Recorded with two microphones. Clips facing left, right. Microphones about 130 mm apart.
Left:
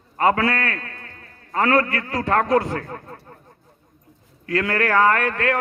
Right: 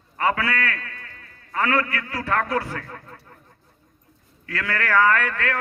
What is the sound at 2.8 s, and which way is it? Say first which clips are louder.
Speech: left 5 dB; 35° left (ahead or behind).